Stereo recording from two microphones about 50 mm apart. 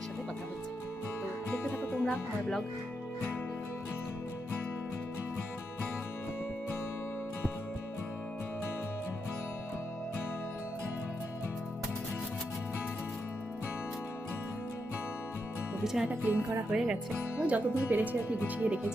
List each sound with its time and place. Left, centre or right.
1.6 s music: left
15.8 s music: centre
16.3 s music: right
16.7 s speech: centre
17.4 s speech: right